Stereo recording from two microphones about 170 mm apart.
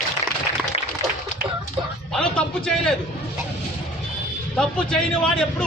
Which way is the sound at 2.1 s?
5° left (ahead or behind).